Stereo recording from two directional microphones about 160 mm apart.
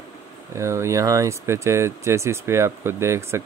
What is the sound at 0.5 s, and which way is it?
Speech, 20° right (ahead or behind).